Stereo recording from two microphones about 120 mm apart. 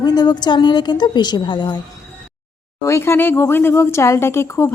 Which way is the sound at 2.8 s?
20° left (ahead or behind).